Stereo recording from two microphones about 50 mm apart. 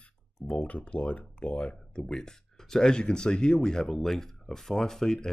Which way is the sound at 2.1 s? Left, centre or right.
Centre.